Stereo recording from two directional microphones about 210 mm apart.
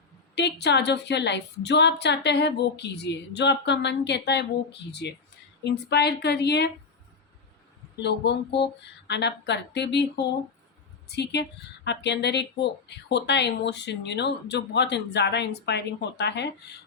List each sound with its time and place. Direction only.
0.3 s a woman's voice: 55° left (ahead or behind)
8.0 s a woman's voice: 55° left (ahead or behind)